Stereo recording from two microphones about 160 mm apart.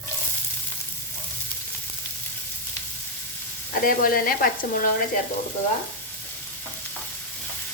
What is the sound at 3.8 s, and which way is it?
Speech, 65° left (ahead or behind).